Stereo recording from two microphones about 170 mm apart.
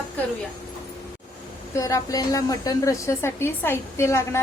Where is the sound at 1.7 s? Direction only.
20° left (ahead or behind).